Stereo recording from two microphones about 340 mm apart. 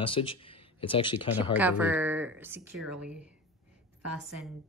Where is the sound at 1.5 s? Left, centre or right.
Centre.